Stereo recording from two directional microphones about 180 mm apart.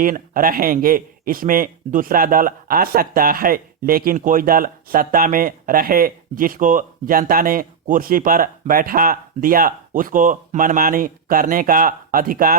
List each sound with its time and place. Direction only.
0.0 s speech: 50° right (ahead or behind)